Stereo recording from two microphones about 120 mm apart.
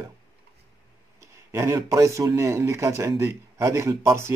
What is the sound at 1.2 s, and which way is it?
Speech, 25° right (ahead or behind).